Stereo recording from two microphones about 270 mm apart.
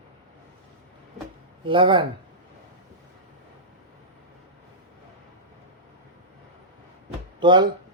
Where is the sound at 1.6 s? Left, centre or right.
Centre.